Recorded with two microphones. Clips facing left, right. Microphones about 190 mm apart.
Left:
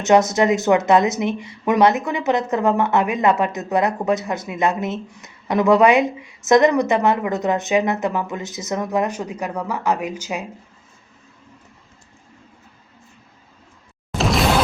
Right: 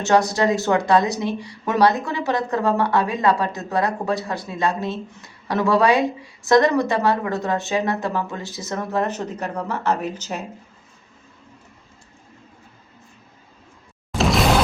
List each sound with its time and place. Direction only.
0.0 s a woman's voice: 20° left (ahead or behind)
14.2 s whoosh: centre (ahead or behind)